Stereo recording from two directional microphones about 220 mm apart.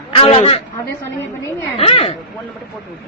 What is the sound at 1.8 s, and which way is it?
Speech, 25° left (ahead or behind).